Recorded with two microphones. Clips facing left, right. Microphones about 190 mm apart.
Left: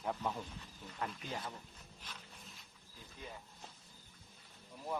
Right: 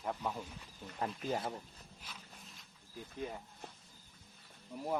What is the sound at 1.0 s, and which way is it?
Speech, 45° right (ahead or behind).